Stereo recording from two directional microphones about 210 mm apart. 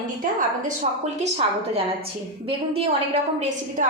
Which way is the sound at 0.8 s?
35° right (ahead or behind).